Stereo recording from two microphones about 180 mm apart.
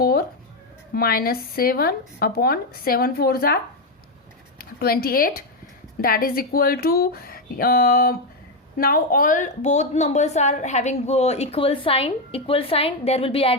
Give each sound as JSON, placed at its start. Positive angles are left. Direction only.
{"t": 0.0, "sound": "music", "side_deg": 55}
{"t": 0.9, "sound": "a woman's voice", "side_deg": 55}